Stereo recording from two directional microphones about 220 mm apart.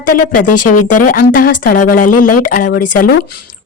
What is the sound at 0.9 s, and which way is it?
A woman's voice, 40° left (ahead or behind).